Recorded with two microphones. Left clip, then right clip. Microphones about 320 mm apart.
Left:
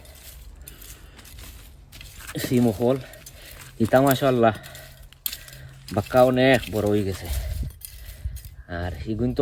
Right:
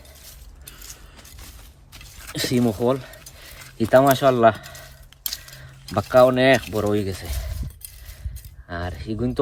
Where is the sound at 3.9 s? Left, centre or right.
Centre.